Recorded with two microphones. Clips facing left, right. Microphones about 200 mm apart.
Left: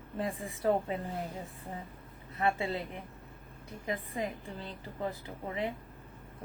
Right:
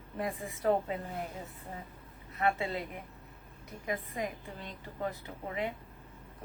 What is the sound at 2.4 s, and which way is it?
Speech, 30° left (ahead or behind).